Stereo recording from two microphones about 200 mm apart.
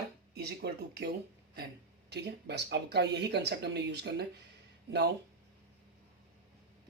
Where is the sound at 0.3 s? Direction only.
55° right (ahead or behind).